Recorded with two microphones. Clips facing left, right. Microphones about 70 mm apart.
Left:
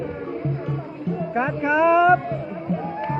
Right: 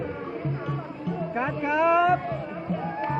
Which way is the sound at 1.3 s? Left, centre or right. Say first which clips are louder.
Left 5 dB; left.